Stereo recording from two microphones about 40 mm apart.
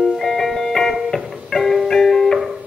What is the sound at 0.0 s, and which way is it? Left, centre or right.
Music, centre.